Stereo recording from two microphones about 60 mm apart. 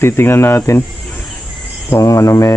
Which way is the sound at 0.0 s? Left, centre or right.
Left.